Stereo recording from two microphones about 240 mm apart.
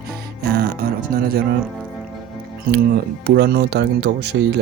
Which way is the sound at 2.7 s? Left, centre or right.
Right.